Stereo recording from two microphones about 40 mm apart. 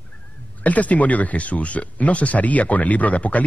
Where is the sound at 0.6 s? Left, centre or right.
Left.